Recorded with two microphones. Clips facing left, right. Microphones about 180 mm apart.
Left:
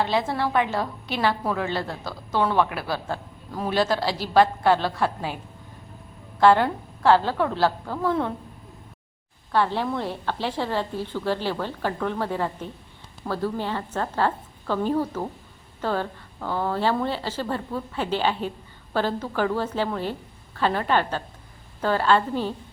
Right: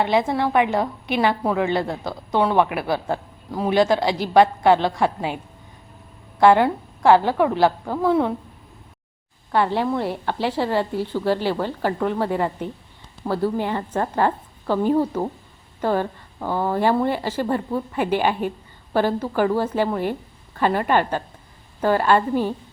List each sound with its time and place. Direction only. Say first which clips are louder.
0.1 s a woman's voice: right 4 dB; 15° right (ahead or behind)
6.4 s a woman's voice: right 3 dB; 15° right (ahead or behind)
9.5 s a woman's voice: right 3 dB; 15° right (ahead or behind)